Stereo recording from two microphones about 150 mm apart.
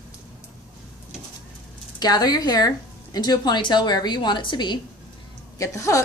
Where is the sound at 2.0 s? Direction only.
25° left (ahead or behind).